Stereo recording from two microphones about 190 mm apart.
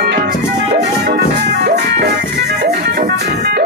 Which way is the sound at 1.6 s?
55° right (ahead or behind).